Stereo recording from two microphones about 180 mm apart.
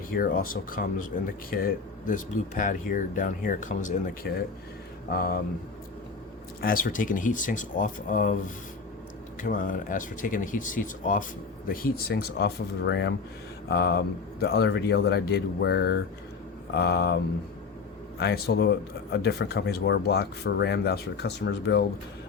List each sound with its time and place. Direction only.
0.1 s speech: 50° left (ahead or behind)
5.1 s speech: 55° left (ahead or behind)
6.6 s speech: 50° left (ahead or behind)
9.4 s speech: 50° left (ahead or behind); by 13.1 s 75° left (ahead or behind)
13.7 s speech: 65° left (ahead or behind)
18.2 s speech: 65° left (ahead or behind)